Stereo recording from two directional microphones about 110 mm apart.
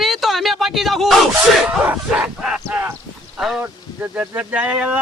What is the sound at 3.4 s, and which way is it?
Speech, 5° right (ahead or behind).